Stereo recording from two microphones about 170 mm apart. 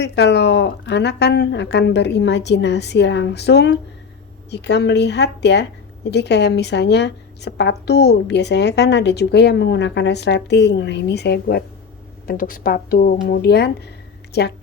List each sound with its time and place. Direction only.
0.0 s a woman's voice: 85° left; by 11.6 s 70° left (ahead or behind)
12.3 s speech: 55° left (ahead or behind); by 14.5 s 75° left (ahead or behind)